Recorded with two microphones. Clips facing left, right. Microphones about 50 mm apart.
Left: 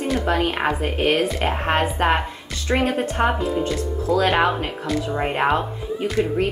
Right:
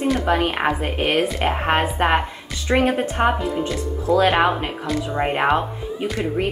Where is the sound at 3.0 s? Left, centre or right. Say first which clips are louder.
Right 1 dB; centre.